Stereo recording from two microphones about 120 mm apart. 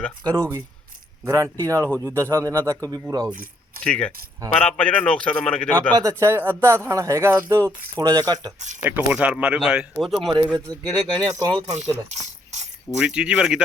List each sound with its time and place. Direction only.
1.2 s speech: 25° right (ahead or behind)
3.8 s a man's voice: 5° left (ahead or behind)
6.0 s speech: 25° right (ahead or behind)
8.8 s speech: 15° right (ahead or behind); by 10.3 s centre (ahead or behind)
10.9 s speech: 35° right (ahead or behind)
11.7 s a sound: 70° right (ahead or behind)
13.0 s speech: 10° right (ahead or behind)